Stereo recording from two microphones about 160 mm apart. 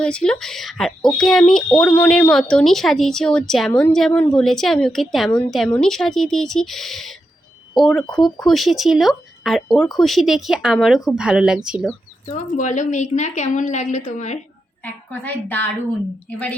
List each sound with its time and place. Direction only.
0.0 s speech: 5° left (ahead or behind)
3.7 s a woman's voice: 15° left (ahead or behind); by 11.9 s 5° right (ahead or behind)
12.3 s a woman's voice: 50° left (ahead or behind)
15.1 s a woman's voice: 10° left (ahead or behind)